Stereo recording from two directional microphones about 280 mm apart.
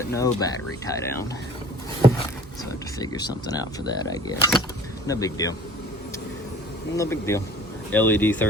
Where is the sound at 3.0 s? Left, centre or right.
Centre.